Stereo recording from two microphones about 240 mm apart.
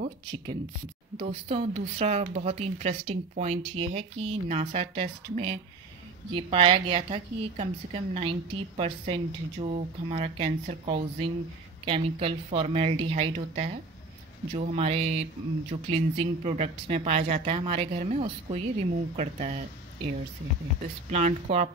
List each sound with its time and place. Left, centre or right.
1.2 s a woman's voice: right